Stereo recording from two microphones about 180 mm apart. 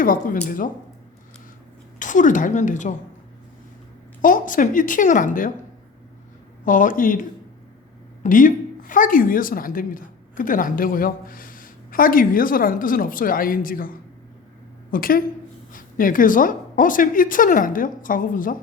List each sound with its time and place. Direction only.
0.0 s a woman's voice: 50° left (ahead or behind)
2.0 s a woman's voice: 45° left (ahead or behind)
4.2 s a woman's voice: 50° left (ahead or behind)
6.7 s a woman's voice: 45° left (ahead or behind)